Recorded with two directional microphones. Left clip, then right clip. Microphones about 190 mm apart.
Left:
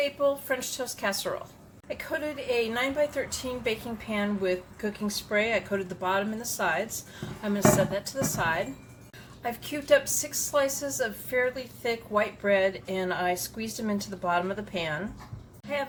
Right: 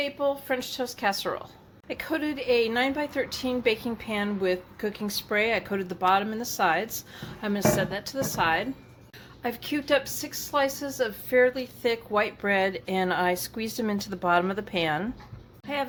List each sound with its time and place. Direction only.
0.4 s a woman's voice: 30° right (ahead or behind)
1.9 s a woman's voice: 45° right (ahead or behind)